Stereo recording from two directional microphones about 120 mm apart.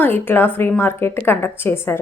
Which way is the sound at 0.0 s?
15° left (ahead or behind).